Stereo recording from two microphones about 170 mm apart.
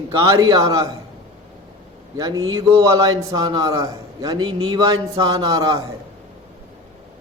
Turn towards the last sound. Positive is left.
turn(degrees=-20)  # may be behind; listen again after turning